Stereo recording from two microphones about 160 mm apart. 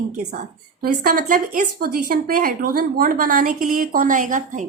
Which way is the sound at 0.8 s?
65° right (ahead or behind).